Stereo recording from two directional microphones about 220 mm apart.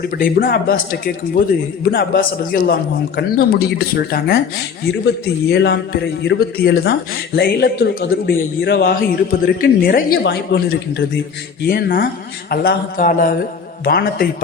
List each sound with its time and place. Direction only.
0.0 s a man's voice: 40° left (ahead or behind)